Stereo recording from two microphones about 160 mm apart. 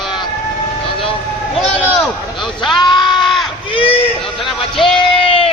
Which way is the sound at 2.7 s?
30° left (ahead or behind).